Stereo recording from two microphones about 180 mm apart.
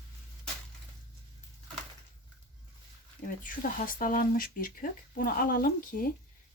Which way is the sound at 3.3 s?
50° left (ahead or behind).